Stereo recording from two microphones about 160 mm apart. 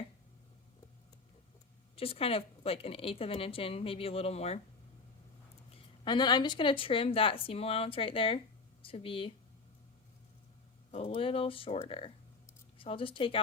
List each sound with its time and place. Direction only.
2.0 s a woman's voice: 35° left (ahead or behind)
6.1 s a woman's voice: 25° left (ahead or behind)
10.9 s a woman's voice: 40° left (ahead or behind)